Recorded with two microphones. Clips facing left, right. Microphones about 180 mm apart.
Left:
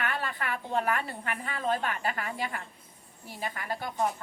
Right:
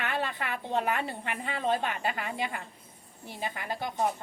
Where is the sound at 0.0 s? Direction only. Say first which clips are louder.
Right 1 dB; 25° right (ahead or behind).